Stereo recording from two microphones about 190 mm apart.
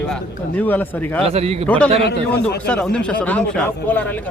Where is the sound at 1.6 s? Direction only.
5° left (ahead or behind).